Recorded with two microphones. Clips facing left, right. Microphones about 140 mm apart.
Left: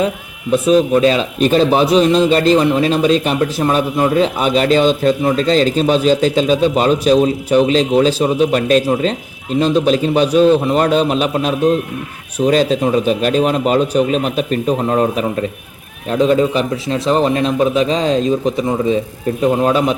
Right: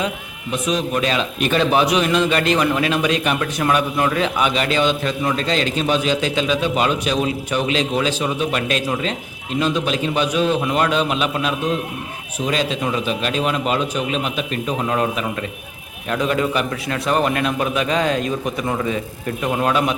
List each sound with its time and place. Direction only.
1.0 s a man's voice: 35° left (ahead or behind)